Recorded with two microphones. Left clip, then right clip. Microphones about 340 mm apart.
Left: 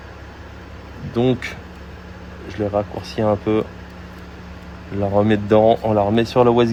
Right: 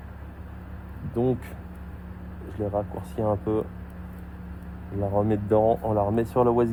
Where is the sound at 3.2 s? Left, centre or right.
Left.